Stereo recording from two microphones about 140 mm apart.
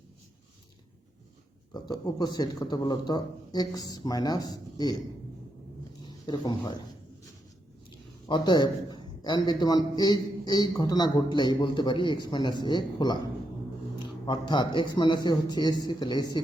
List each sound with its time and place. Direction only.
1.7 s speech: 30° left (ahead or behind)
6.0 s a sound: 35° left (ahead or behind)
8.3 s a man's voice: 30° left (ahead or behind)
14.3 s a man's voice: 35° left (ahead or behind)